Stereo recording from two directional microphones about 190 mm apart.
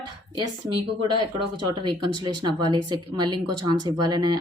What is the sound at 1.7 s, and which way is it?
Speech, 25° right (ahead or behind).